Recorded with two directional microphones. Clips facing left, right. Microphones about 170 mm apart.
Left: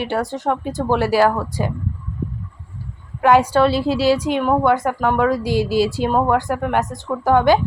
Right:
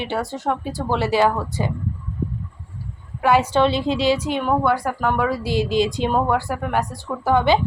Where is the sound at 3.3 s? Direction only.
10° left (ahead or behind).